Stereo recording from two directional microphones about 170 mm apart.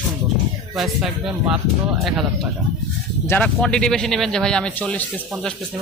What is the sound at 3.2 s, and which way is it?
Speech, 10° left (ahead or behind).